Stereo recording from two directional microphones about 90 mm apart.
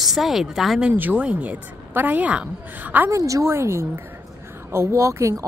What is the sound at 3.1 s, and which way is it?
Speech, 35° right (ahead or behind).